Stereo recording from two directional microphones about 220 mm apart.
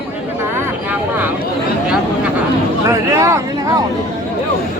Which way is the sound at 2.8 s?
15° right (ahead or behind).